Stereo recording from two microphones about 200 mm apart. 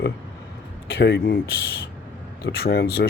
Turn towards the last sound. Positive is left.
turn(degrees=55)  # may be behind; listen again after turning